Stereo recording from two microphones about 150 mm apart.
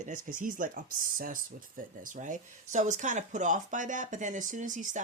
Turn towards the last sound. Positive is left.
turn(degrees=-55)  # may be behind; listen again after turning